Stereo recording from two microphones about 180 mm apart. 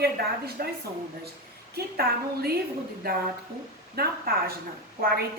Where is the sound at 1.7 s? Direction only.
60° right (ahead or behind).